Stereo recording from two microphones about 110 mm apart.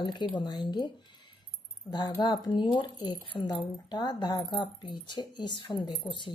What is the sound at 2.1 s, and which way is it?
Speech, 45° left (ahead or behind).